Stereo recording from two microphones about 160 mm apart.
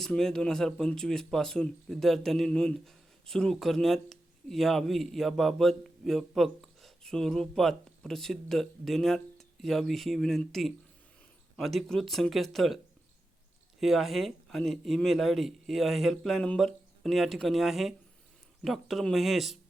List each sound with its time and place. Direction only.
0.0 s speech: 5° left (ahead or behind)